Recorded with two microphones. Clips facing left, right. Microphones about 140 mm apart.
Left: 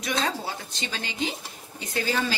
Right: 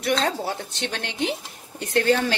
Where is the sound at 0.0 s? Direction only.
60° right (ahead or behind).